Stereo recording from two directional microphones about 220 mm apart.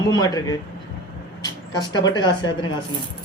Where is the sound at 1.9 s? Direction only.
20° left (ahead or behind).